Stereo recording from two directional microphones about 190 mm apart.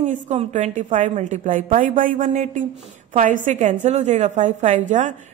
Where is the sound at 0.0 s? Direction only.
40° right (ahead or behind).